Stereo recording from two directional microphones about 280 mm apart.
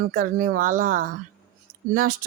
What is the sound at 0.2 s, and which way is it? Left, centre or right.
Speech, right.